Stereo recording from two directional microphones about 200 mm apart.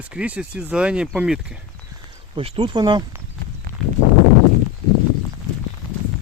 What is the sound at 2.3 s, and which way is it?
Speech, 25° right (ahead or behind).